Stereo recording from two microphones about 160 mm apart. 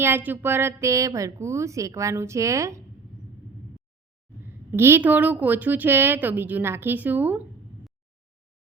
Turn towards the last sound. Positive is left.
turn(degrees=-10)  # may be behind; listen again after turning